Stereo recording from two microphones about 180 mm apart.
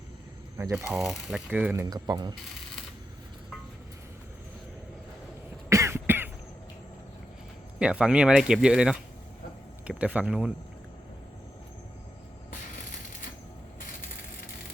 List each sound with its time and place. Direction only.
0.5 s speech: 15° right (ahead or behind)
0.9 s speech: centre (ahead or behind); by 2.3 s 25° right (ahead or behind)
5.6 s cough: 15° right (ahead or behind)
7.8 s speech: 5° right (ahead or behind)